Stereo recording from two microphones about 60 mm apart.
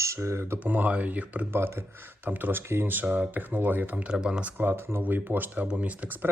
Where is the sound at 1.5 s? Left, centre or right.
Right.